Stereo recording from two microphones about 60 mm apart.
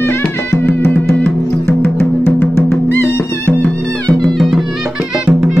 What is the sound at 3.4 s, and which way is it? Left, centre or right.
Music, left.